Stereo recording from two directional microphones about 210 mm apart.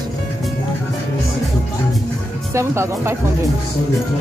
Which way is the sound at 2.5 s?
15° right (ahead or behind).